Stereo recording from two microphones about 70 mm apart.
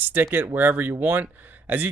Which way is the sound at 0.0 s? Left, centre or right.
Right.